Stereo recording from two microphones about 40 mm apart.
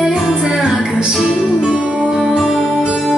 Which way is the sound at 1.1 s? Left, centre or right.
Centre.